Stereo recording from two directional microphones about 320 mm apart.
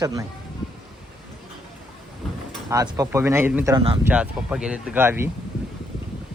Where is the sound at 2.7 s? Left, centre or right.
Centre.